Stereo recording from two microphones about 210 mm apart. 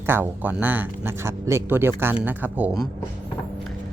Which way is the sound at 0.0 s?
10° right (ahead or behind).